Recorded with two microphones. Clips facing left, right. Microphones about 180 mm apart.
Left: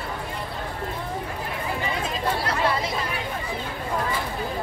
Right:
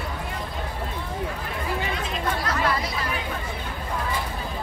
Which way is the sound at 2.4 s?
30° left (ahead or behind).